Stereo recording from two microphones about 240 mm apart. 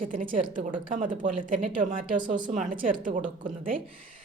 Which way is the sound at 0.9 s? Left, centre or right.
Right.